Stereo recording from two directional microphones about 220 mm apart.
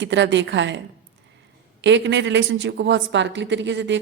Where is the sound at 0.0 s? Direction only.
55° right (ahead or behind).